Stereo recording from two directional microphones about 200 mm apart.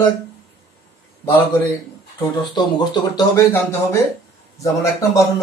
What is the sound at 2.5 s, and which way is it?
Speech, 20° left (ahead or behind).